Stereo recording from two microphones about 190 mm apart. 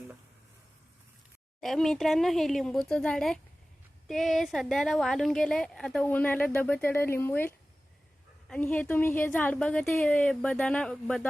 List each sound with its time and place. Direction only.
1.6 s a woman's voice: centre (ahead or behind)